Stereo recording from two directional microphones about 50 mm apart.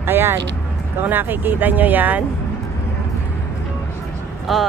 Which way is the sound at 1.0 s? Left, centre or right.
Right.